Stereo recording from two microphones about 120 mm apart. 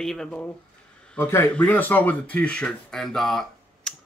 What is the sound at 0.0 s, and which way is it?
Speech, 5° left (ahead or behind).